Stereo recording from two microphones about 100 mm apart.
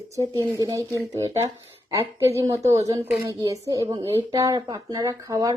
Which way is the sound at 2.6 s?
30° right (ahead or behind).